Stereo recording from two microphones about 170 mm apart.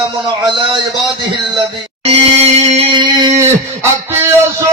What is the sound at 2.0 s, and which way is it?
Music, 40° right (ahead or behind).